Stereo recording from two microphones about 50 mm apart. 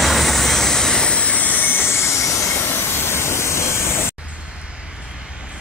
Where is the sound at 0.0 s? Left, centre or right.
Centre; by 2.5 s left.